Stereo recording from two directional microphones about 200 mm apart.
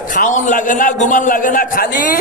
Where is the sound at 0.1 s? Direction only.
40° left (ahead or behind).